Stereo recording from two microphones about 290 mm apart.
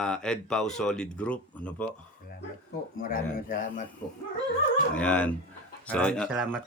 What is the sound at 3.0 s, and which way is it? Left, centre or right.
Speech, left.